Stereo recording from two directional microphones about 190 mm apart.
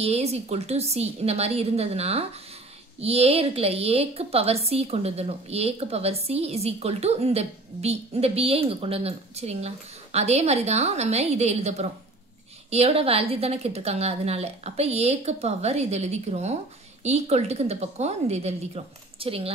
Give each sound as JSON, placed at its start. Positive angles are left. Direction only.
{"t": 0.0, "sound": "a woman's voice", "side_deg": -35}